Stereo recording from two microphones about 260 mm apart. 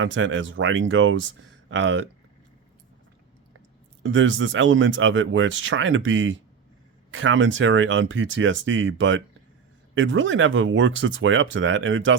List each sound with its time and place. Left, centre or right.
0.0 s speech: right
4.0 s speech: right